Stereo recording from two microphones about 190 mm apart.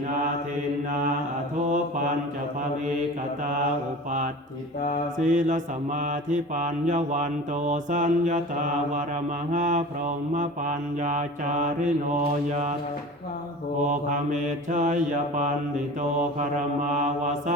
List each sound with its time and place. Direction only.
5.2 s mantra: 40° right (ahead or behind)
13.9 s mantra: 40° right (ahead or behind)